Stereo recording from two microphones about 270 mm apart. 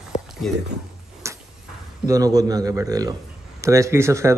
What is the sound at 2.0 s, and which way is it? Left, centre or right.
Speech, centre.